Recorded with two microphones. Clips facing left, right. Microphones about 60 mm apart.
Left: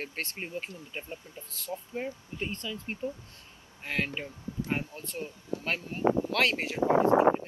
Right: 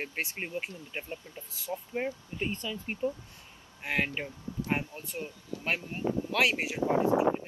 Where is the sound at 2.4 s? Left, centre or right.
Centre.